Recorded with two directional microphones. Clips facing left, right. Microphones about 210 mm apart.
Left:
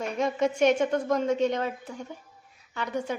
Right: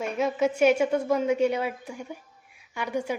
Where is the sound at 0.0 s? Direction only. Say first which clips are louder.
Right 1 dB; 5° right (ahead or behind).